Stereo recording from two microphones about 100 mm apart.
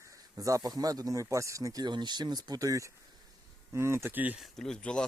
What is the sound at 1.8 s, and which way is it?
Speech, 45° right (ahead or behind).